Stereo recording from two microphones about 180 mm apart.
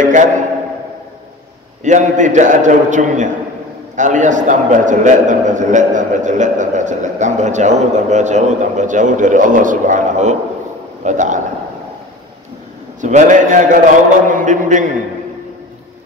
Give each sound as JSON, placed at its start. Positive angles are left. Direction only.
{"t": 0.0, "sound": "a man's voice", "side_deg": -45}
{"t": 1.8, "sound": "a man's voice", "side_deg": -45}
{"t": 13.0, "sound": "a man's voice", "side_deg": -45}